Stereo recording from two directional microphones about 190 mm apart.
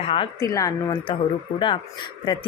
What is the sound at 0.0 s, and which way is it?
Speech, 30° left (ahead or behind).